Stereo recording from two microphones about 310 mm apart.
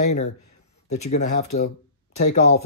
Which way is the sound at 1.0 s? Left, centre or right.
Left.